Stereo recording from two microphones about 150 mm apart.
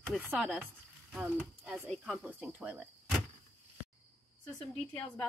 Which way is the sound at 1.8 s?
Centre (ahead or behind).